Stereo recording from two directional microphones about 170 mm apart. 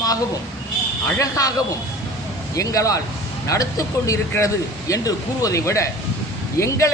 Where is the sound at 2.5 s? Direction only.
20° left (ahead or behind).